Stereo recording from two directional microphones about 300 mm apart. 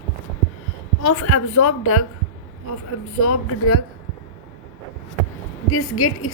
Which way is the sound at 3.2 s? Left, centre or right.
Left.